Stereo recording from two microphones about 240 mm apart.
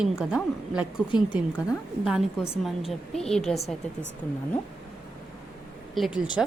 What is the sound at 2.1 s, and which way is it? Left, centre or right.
A woman's voice, centre.